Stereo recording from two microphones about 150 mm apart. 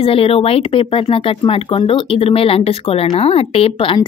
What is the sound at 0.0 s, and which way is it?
Speech, 40° left (ahead or behind).